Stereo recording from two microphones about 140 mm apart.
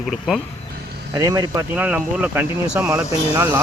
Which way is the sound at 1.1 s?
25° right (ahead or behind).